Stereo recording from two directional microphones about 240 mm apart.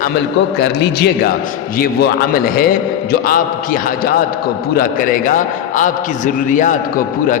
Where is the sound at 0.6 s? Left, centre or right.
Left.